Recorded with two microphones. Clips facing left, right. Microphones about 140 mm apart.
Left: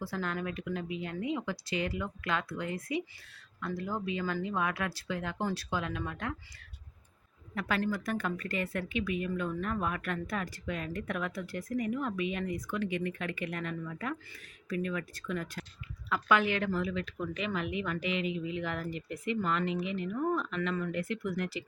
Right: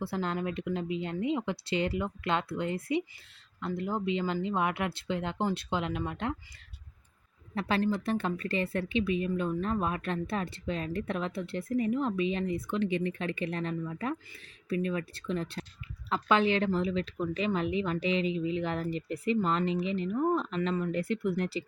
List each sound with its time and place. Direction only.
0.1 s speech: 25° right (ahead or behind)
7.5 s speech: 30° right (ahead or behind)